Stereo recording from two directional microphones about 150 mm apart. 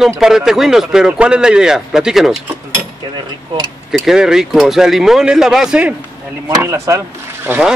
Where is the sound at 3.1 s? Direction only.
30° right (ahead or behind).